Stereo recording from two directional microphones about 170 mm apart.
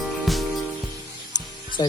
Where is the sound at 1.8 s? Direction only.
25° left (ahead or behind).